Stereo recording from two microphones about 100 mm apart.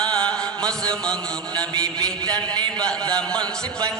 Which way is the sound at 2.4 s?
45° right (ahead or behind).